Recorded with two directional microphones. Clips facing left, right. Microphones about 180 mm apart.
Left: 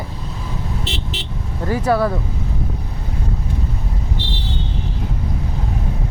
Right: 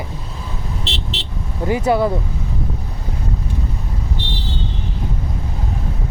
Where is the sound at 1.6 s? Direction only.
20° right (ahead or behind).